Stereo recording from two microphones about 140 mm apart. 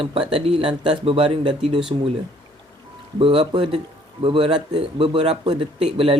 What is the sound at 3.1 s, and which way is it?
Speech, 40° right (ahead or behind).